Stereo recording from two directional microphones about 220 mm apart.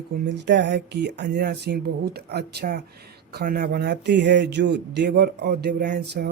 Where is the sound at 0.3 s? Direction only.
50° right (ahead or behind).